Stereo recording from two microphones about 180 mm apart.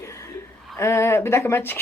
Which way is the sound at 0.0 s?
15° left (ahead or behind).